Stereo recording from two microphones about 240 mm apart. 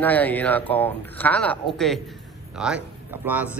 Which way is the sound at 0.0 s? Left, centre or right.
Centre.